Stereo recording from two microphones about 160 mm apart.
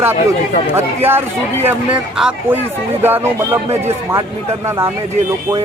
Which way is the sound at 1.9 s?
5° right (ahead or behind).